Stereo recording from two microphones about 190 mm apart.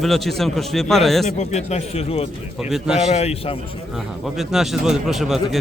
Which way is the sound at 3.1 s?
35° left (ahead or behind).